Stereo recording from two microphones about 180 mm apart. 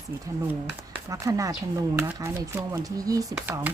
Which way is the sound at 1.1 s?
20° right (ahead or behind).